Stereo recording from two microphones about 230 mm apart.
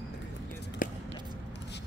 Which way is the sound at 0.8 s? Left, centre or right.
Left.